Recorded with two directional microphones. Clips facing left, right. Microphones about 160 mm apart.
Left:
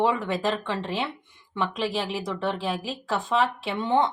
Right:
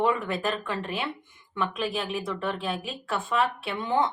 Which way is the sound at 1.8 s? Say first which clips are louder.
Left 2 dB; 90° left.